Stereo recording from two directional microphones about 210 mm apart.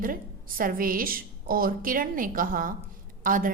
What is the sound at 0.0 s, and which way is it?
A woman's voice, 40° right (ahead or behind).